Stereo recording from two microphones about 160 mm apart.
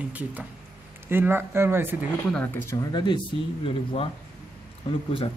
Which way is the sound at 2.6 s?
25° left (ahead or behind).